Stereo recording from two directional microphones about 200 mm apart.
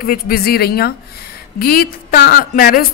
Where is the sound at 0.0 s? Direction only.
50° left (ahead or behind).